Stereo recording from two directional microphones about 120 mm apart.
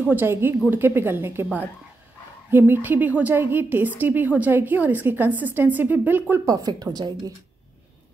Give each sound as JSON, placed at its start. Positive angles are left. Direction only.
{"t": 0.0, "sound": "a woman's voice", "side_deg": -15}
{"t": 6.4, "sound": "speech", "side_deg": -30}